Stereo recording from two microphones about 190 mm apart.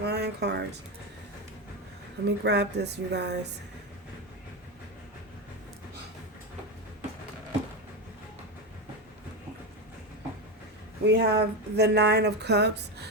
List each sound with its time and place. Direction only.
0.0 s speech: 60° right (ahead or behind)
2.2 s speech: 60° right (ahead or behind)
11.0 s speech: 60° right (ahead or behind)